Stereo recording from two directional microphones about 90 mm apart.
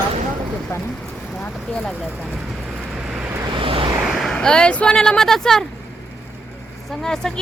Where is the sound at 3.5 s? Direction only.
80° right.